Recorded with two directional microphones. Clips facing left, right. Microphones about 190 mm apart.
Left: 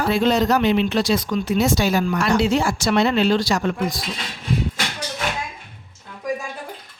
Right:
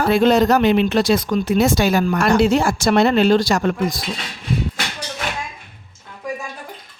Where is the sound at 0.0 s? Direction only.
55° right (ahead or behind).